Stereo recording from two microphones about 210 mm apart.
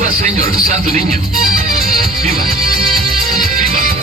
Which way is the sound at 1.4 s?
40° right (ahead or behind).